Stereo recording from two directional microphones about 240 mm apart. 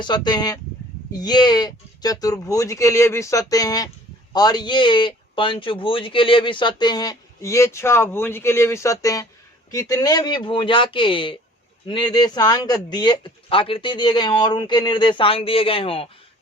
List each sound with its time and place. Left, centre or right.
0.0 s a man's voice: centre